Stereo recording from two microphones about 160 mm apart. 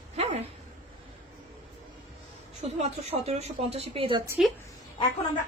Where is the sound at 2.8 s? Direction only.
40° right (ahead or behind).